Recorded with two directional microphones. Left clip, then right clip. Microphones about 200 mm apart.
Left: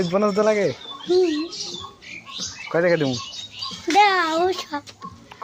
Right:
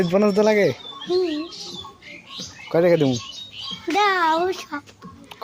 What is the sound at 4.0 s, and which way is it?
Speech, 15° right (ahead or behind).